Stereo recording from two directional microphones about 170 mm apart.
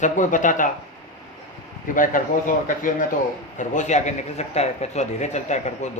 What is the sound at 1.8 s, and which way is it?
A man's voice, 50° left (ahead or behind).